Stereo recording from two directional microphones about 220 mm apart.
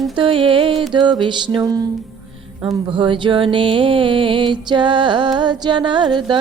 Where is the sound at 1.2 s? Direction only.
20° right (ahead or behind).